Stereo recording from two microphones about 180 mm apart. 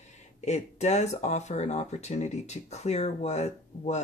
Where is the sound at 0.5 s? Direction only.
40° left (ahead or behind).